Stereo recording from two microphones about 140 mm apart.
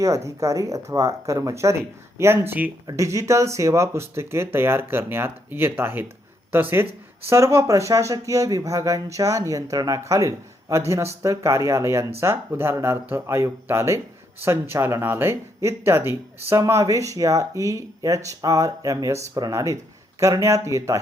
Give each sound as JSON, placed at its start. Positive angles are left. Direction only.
{"t": 0.0, "sound": "speech", "side_deg": -20}